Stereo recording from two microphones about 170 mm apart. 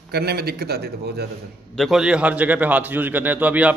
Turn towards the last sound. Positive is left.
turn(degrees=-10)  # may be behind; listen again after turning